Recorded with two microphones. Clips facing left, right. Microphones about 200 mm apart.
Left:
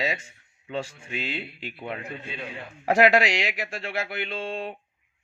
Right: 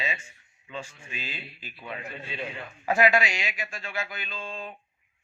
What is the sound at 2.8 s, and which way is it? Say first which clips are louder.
Speech: left 4 dB; 70° left (ahead or behind).